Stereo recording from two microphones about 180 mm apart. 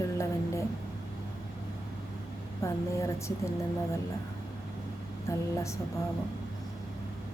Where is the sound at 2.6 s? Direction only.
15° left (ahead or behind).